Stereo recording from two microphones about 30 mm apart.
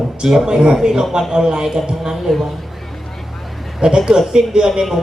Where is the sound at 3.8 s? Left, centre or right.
Right.